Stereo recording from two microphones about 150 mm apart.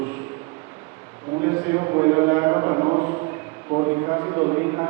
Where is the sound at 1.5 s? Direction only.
20° right (ahead or behind).